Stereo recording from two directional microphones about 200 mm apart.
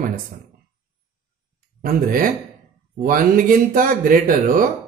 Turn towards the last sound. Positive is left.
turn(degrees=-45)  # may be behind; listen again after turning